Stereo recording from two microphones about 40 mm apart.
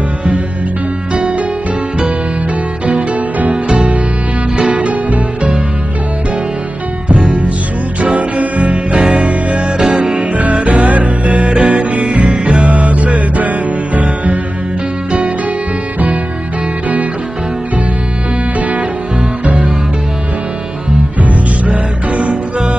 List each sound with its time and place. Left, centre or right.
1.1 s music: right
2.9 s music: right
7.1 s music: right
18.6 s music: right
21.2 s music: right